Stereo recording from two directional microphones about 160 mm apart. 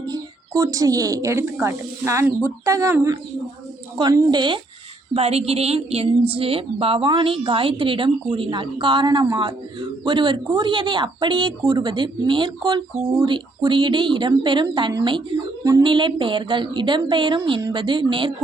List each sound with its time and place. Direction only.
0.0 s speech: 25° right (ahead or behind)
5.1 s a woman's voice: 40° right (ahead or behind)